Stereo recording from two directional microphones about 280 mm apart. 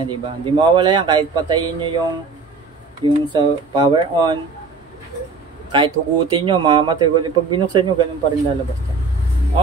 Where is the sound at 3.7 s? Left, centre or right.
Centre.